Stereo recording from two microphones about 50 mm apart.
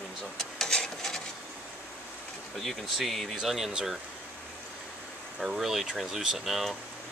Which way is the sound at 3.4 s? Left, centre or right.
Centre.